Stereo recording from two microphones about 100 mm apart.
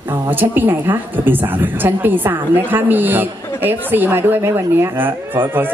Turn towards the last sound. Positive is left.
turn(degrees=-20)  # may be behind; listen again after turning